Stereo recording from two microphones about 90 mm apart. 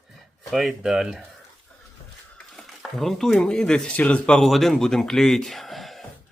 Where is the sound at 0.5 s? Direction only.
Centre (ahead or behind).